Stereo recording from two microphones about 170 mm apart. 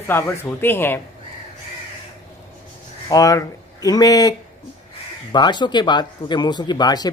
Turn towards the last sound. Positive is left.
turn(degrees=25)  # may be behind; listen again after turning